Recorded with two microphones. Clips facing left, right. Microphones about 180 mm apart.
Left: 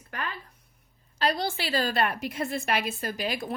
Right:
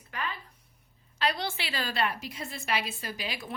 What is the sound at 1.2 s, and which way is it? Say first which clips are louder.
A woman's voice: left 3 dB; 40° left (ahead or behind).